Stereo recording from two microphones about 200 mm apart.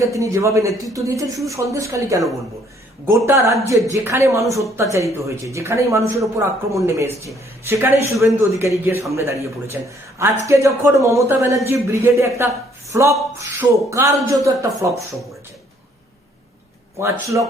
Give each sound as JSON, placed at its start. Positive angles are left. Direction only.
{"t": 0.0, "sound": "speech", "side_deg": -15}
{"t": 3.2, "sound": "speech", "side_deg": -15}
{"t": 17.0, "sound": "speech", "side_deg": -15}